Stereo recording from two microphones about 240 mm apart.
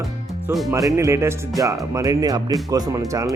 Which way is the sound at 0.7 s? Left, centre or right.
Centre.